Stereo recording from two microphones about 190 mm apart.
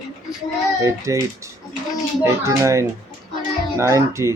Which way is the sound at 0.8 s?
15° right (ahead or behind).